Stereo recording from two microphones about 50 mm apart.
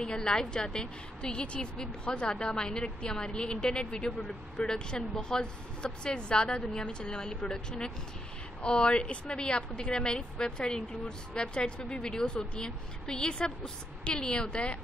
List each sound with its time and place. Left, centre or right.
0.0 s a woman's voice: centre